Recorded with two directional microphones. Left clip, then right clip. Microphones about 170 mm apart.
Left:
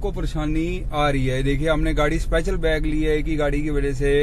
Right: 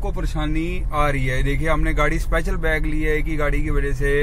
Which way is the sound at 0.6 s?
15° left (ahead or behind).